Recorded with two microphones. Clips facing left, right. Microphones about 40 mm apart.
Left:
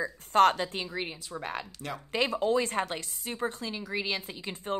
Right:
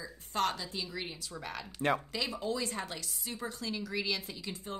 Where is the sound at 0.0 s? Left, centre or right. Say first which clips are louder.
Left 11 dB; left.